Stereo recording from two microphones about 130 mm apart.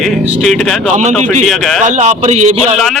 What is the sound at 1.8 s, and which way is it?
Speech, 65° right (ahead or behind).